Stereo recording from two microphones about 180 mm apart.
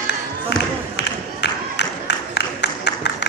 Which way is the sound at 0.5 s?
70° left (ahead or behind).